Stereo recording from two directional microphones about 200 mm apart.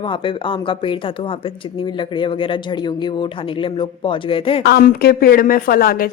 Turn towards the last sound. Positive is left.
turn(degrees=45)  # may be behind; listen again after turning